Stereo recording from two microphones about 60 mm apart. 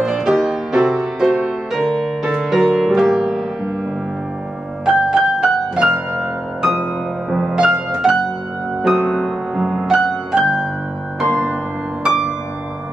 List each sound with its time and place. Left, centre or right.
0.0 s music: centre
4.8 s music: centre